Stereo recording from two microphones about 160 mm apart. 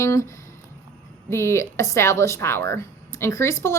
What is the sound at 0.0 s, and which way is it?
Speech, 20° left (ahead or behind).